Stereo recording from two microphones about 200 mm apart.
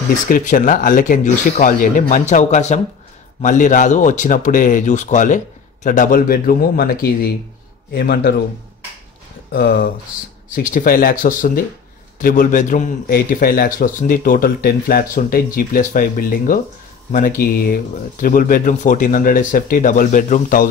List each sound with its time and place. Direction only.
0.3 s a man's voice: 45° left (ahead or behind)
9.5 s a man's voice: 50° left (ahead or behind)